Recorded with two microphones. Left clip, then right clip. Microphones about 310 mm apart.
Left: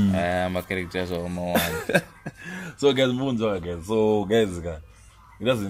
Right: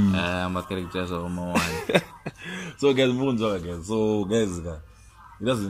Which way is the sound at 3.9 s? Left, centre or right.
Left.